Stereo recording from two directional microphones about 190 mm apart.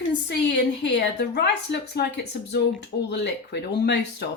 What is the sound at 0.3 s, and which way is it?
Speech, 65° left (ahead or behind).